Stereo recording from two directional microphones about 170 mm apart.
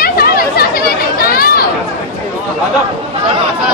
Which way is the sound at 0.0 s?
65° left (ahead or behind).